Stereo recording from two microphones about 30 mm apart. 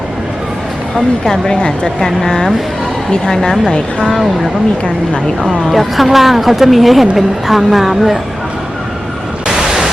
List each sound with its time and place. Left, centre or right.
1.2 s speech: centre
1.5 s speech: left
3.7 s speech: left
5.7 s a woman's voice: centre
9.6 s pink noise: centre